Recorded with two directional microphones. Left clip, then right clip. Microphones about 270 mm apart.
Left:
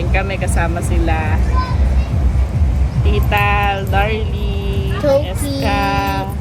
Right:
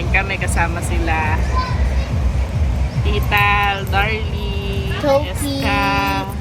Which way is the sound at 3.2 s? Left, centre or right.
Centre.